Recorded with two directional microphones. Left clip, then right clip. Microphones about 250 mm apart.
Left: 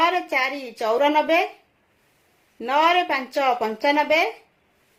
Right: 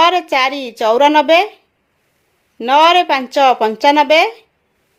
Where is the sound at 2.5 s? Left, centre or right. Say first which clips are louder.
Right 9 dB; right.